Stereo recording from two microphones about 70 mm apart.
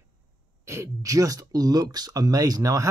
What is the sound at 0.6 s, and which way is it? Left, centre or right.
Speech, right.